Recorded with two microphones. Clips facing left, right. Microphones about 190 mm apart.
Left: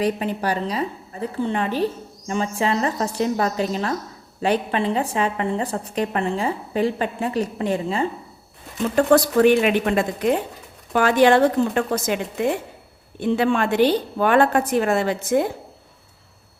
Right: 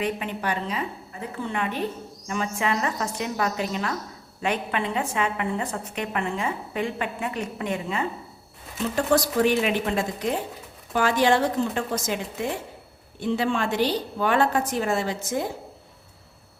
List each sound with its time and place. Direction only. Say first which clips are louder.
0.0 s a woman's voice: left 5 dB; 35° left (ahead or behind)
9.0 s a woman's voice: left 6 dB; 60° left (ahead or behind)